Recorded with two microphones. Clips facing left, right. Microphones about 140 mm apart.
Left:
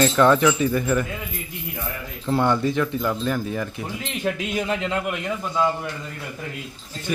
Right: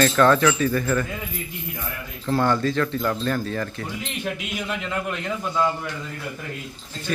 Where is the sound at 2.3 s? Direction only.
20° left (ahead or behind).